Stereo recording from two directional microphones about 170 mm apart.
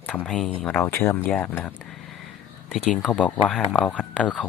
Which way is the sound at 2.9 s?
5° left (ahead or behind).